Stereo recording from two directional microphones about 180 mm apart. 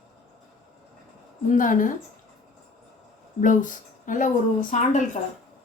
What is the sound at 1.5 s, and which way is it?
Speech, 50° left (ahead or behind).